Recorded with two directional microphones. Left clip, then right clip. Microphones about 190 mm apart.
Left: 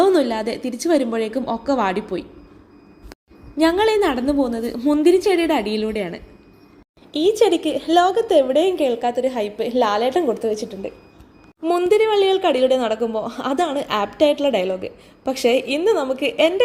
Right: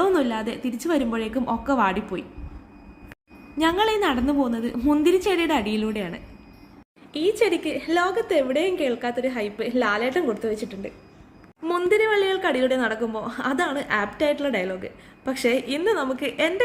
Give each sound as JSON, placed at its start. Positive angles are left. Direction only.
{"t": 0.0, "sound": "a woman's voice", "side_deg": 15}
{"t": 3.6, "sound": "a woman's voice", "side_deg": 15}